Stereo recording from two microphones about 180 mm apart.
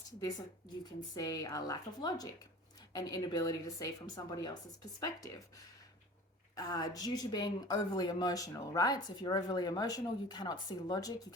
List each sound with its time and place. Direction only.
1.1 s speech: 20° left (ahead or behind)